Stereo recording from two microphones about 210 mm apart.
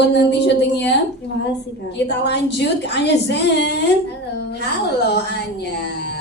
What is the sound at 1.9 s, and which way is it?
A woman's voice, 55° left (ahead or behind).